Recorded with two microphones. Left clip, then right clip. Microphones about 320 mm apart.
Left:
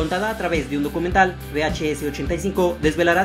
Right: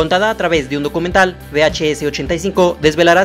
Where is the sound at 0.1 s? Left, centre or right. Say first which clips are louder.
Right 9 dB; right.